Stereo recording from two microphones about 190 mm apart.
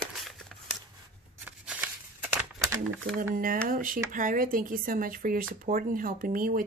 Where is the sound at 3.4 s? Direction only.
45° right (ahead or behind).